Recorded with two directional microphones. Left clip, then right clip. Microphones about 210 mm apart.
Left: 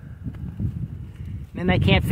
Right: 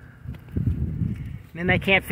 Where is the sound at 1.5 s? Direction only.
15° left (ahead or behind).